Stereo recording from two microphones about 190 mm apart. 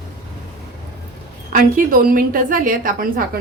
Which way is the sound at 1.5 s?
45° right (ahead or behind).